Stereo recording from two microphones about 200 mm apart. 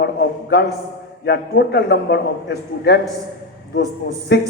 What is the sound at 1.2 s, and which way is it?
A man's voice, 55° left (ahead or behind).